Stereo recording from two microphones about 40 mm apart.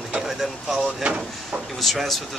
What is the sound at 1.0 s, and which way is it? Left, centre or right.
Speech, right.